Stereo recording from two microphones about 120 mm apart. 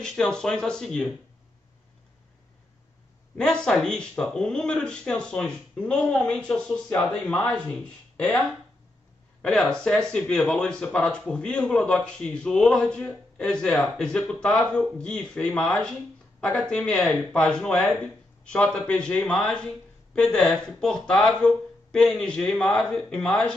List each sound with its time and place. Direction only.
0.0 s speech: 5° left (ahead or behind)
3.3 s speech: 5° left (ahead or behind)